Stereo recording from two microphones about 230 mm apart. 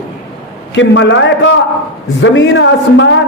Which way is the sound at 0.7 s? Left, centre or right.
Left.